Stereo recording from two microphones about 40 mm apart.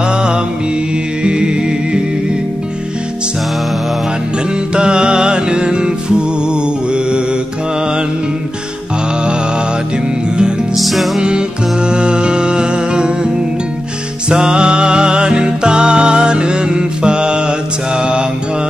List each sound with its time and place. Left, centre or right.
0.1 s mantra: right
1.2 s music: right
4.7 s music: right
10.8 s music: centre
11.1 s music: right
14.3 s music: centre